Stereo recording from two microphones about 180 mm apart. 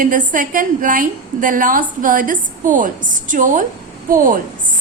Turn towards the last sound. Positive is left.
turn(degrees=-50)  # may be behind; listen again after turning